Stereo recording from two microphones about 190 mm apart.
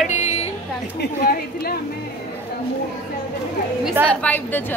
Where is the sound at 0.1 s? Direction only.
35° left (ahead or behind).